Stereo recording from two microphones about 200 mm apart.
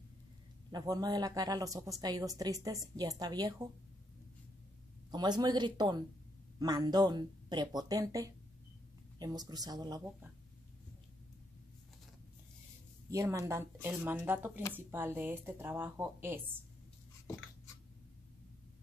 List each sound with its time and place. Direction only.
0.7 s speech: 20° right (ahead or behind)
5.1 s speech: 20° right (ahead or behind)
13.1 s speech: 15° right (ahead or behind)